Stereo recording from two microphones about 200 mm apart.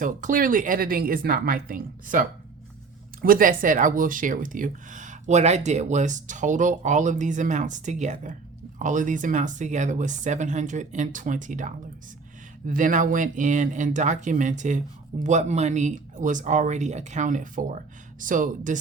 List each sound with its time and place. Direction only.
0.0 s speech: 40° right (ahead or behind)